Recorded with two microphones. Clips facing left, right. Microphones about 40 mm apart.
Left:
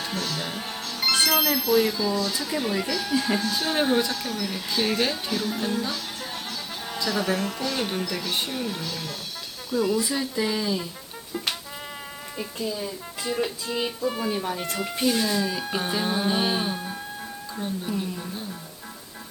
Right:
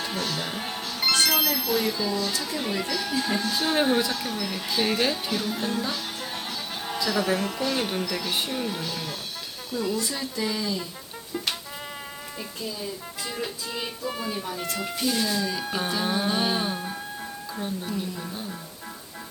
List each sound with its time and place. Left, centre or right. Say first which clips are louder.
0.0 s music: even; centre
2.6 s speech: left 3 dB; centre
9.7 s speech: left 4 dB; centre
12.4 s speech: left 5 dB; centre